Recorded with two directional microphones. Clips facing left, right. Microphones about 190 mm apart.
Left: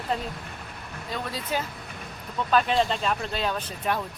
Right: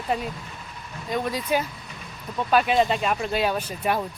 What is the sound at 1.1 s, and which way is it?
Speech, 15° right (ahead or behind).